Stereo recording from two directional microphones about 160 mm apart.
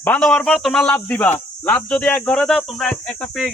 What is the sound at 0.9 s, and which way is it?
Speech, 10° left (ahead or behind).